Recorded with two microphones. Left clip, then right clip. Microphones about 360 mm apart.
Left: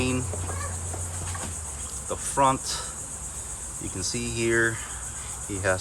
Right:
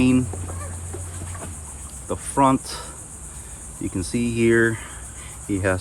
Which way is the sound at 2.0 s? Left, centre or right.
Centre.